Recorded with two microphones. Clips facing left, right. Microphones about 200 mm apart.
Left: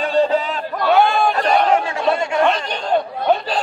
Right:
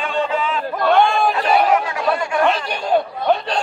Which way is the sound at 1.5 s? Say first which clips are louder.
Right 1 dB; 5° right (ahead or behind).